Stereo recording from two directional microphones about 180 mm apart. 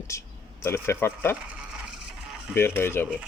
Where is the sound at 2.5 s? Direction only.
10° left (ahead or behind).